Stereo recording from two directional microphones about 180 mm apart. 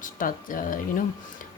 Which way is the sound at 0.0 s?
50° left (ahead or behind).